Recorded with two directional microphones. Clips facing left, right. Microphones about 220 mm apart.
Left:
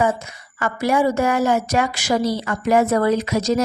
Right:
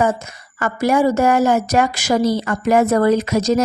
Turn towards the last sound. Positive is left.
turn(degrees=-45)  # may be behind; listen again after turning